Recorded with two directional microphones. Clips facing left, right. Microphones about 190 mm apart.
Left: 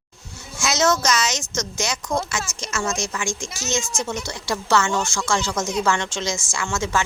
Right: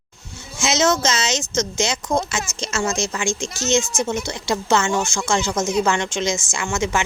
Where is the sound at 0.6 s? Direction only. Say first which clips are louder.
Right 2 dB; 20° right (ahead or behind).